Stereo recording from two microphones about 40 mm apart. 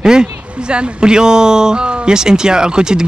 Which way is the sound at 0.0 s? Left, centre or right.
Centre.